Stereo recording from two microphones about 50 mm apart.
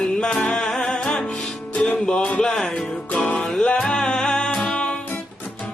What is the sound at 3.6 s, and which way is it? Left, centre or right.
Music, centre.